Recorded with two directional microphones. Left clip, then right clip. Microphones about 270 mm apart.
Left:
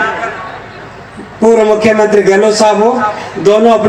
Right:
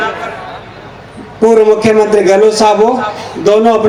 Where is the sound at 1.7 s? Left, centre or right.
Right.